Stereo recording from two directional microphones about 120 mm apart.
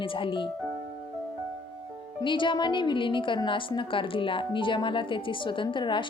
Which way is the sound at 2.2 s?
40° left (ahead or behind).